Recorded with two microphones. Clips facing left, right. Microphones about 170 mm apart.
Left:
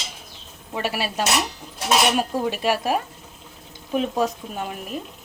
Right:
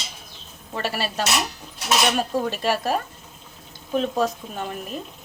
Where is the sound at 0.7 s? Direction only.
10° left (ahead or behind).